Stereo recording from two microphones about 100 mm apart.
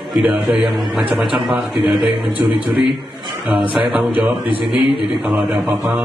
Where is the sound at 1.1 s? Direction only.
5° right (ahead or behind).